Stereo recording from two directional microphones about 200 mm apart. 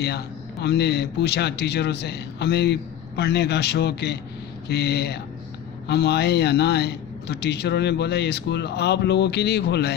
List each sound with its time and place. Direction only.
0.0 s a man's voice: 55° left (ahead or behind)